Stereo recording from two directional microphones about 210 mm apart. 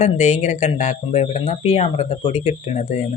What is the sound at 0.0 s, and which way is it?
Speech, 35° left (ahead or behind).